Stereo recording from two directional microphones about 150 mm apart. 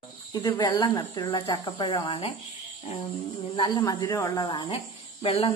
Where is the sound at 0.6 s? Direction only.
30° left (ahead or behind).